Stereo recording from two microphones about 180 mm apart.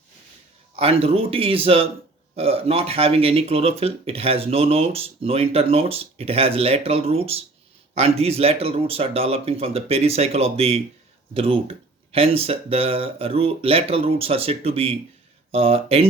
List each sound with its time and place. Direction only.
0.8 s speech: 35° right (ahead or behind)